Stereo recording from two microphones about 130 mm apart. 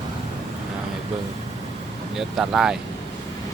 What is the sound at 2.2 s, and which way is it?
Speech, 5° right (ahead or behind).